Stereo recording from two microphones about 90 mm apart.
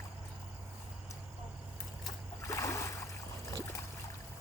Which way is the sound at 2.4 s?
35° left (ahead or behind).